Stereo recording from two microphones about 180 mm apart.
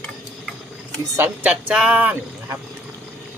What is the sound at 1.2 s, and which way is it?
Speech, 5° right (ahead or behind).